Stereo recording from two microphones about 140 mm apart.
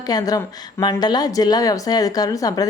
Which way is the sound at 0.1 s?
25° left (ahead or behind).